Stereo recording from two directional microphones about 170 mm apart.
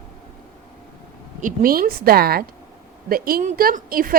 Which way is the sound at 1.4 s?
55° right (ahead or behind).